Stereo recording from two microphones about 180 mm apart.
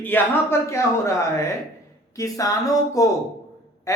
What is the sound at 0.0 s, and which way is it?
Speech, 10° left (ahead or behind).